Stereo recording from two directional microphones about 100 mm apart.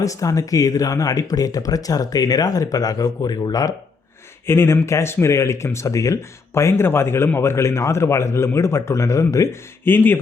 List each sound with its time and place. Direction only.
0.0 s speech: 35° left (ahead or behind)
4.4 s speech: 25° left (ahead or behind)